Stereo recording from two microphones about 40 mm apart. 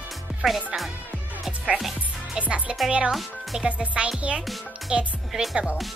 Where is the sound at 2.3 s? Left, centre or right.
Right.